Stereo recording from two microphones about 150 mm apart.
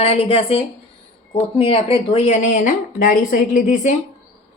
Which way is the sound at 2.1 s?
50° left (ahead or behind).